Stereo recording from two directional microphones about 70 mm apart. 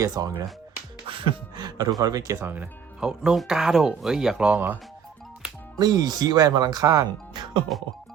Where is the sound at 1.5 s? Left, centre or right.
Right.